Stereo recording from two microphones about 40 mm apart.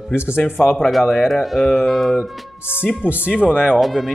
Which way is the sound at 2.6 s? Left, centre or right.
Left.